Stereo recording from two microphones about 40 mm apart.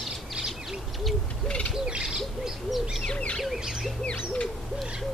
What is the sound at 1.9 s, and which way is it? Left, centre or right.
Owl, centre.